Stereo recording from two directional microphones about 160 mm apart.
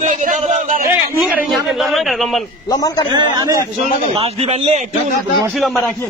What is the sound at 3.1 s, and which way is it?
Speech, 25° right (ahead or behind).